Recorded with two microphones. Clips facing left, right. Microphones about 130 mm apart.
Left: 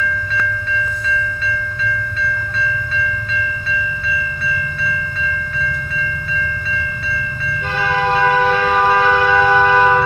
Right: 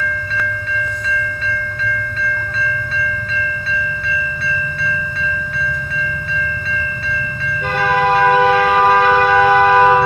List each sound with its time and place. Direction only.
7.8 s vehicle: 50° right (ahead or behind)
8.5 s shofar: 50° right (ahead or behind)
9.6 s music: 35° right (ahead or behind)